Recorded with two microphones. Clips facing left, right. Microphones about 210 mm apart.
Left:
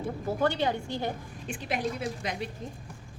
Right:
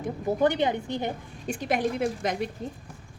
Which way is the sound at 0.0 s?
20° right (ahead or behind).